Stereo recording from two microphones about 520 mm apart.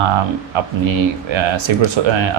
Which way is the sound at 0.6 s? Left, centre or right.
Right.